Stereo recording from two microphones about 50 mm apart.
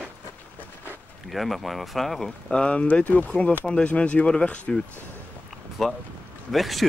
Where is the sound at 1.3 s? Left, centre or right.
Centre.